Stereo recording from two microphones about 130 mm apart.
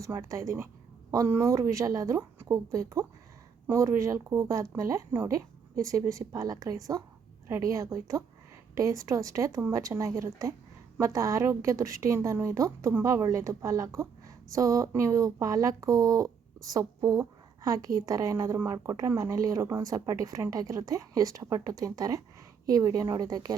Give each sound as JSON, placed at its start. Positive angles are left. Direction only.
{"t": 0.0, "sound": "a woman's voice", "side_deg": -25}